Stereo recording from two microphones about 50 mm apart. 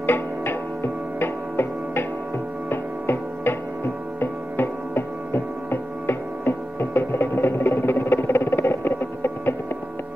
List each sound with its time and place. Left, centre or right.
0.0 s music: left
2.7 s hum: left